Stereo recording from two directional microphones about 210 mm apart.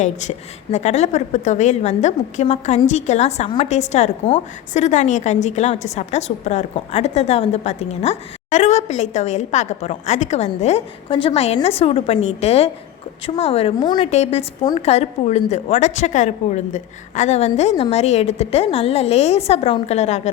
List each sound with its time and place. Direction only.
0.0 s a woman's voice: 35° left (ahead or behind)